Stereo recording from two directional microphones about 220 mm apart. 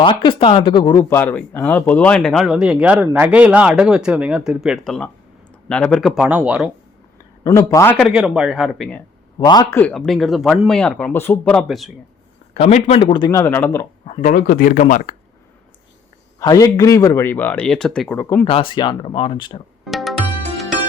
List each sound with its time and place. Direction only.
0.0 s speech: 20° left (ahead or behind); by 6.7 s 5° right (ahead or behind)
7.4 s a man's voice: 15° left (ahead or behind)
7.9 s speech: centre (ahead or behind)
9.4 s a man's voice: 20° left (ahead or behind); by 11.9 s centre (ahead or behind)
12.5 s speech: 30° left (ahead or behind); by 13.8 s 10° left (ahead or behind)
14.1 s speech: 35° left (ahead or behind)
16.4 s a man's voice: 15° left (ahead or behind)
18.4 s speech: 25° left (ahead or behind)
19.8 s music: centre (ahead or behind)